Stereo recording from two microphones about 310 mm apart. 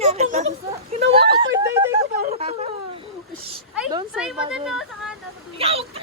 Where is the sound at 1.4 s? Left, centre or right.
Centre.